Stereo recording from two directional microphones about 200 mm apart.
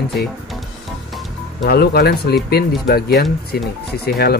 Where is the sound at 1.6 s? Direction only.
50° left (ahead or behind).